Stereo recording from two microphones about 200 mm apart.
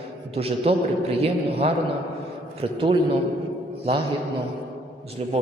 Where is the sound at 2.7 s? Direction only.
25° right (ahead or behind).